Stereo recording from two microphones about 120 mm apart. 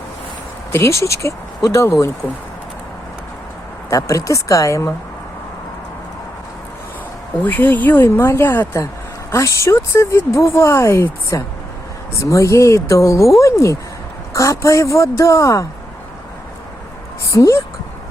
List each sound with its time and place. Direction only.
0.7 s speech: 20° left (ahead or behind)
3.8 s speech: 25° left (ahead or behind)
7.4 s speech: 15° left (ahead or behind)
17.2 s a woman's voice: 25° left (ahead or behind)